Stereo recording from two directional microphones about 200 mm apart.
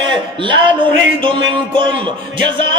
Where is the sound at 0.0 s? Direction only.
25° right (ahead or behind).